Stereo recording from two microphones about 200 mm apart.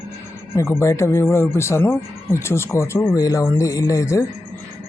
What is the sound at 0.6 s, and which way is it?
Speech, 15° left (ahead or behind).